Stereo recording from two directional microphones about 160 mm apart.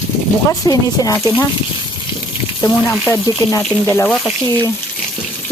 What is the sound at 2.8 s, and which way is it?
Speech, centre (ahead or behind).